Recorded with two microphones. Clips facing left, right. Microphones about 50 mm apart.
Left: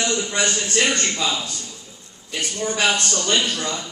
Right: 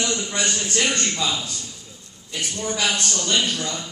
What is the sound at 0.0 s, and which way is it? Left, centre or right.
Speech, left.